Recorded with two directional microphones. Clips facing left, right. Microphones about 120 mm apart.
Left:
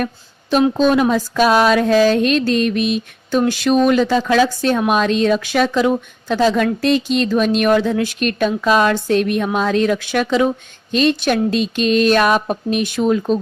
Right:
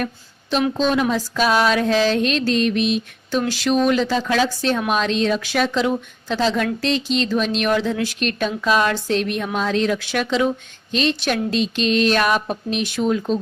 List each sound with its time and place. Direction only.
0.8 s mantra: 50° left (ahead or behind)